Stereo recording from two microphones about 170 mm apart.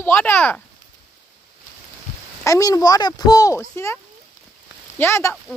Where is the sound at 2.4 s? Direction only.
20° left (ahead or behind).